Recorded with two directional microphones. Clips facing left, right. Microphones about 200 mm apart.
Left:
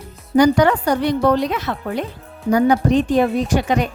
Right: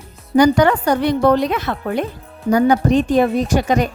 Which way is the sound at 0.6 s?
55° right (ahead or behind).